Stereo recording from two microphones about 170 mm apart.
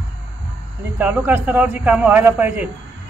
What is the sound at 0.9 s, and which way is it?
A man's voice, 10° right (ahead or behind).